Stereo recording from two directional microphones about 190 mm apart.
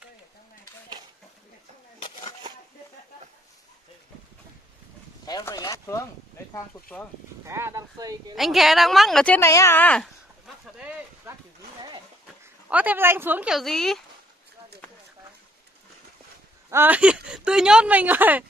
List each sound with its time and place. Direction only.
2.0 s a sound: 25° left (ahead or behind)
5.2 s speech: 20° left (ahead or behind)
7.4 s speech: 15° right (ahead or behind)
8.4 s speech: centre (ahead or behind)
10.8 s speech: 5° right (ahead or behind)
12.6 s speech: 10° right (ahead or behind)
16.7 s speech: 10° right (ahead or behind)